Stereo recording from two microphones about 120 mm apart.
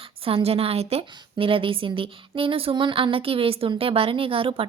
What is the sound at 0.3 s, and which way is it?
A woman's voice, 55° right (ahead or behind).